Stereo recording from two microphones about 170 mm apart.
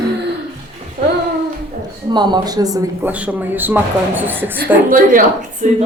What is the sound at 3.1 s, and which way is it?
A woman's voice, 10° right (ahead or behind).